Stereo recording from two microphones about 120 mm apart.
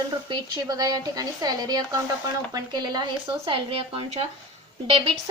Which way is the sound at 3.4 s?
45° right (ahead or behind).